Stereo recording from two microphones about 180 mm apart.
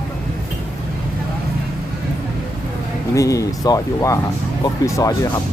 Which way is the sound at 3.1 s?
20° left (ahead or behind).